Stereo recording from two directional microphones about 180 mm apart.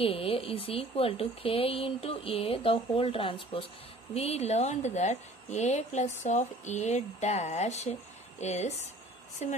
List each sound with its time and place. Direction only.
0.0 s speech: 30° left (ahead or behind)